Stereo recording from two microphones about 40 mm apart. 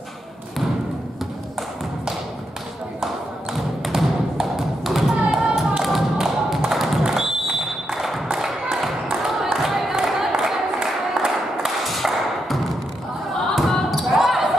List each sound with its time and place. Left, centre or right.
3.9 s music: centre
4.8 s thump: centre
5.5 s tap: centre
5.9 s thump: centre
7.1 s a sound: centre
13.8 s basketball bounce: centre